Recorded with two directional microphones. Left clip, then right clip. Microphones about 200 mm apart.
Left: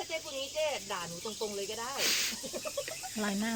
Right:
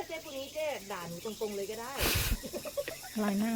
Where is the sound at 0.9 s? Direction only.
30° right (ahead or behind).